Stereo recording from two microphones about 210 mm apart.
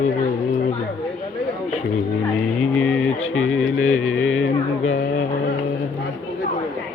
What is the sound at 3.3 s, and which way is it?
Speech, 80° left.